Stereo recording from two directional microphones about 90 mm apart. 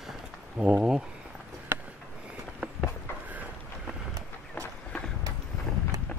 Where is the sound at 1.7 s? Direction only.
30° right (ahead or behind).